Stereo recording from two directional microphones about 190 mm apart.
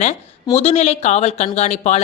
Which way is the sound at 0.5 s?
35° left (ahead or behind).